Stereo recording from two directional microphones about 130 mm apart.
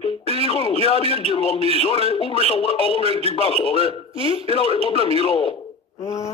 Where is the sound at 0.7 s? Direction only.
50° right (ahead or behind).